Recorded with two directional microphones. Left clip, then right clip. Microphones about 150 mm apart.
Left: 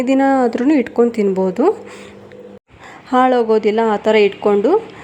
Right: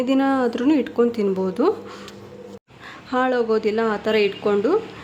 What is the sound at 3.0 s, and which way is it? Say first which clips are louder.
Speech: left 7 dB; 30° left (ahead or behind).